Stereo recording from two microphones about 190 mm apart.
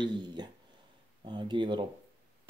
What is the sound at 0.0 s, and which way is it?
Speech, 25° right (ahead or behind).